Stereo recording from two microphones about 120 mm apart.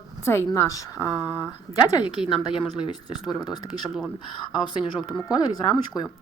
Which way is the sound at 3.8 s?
Centre (ahead or behind).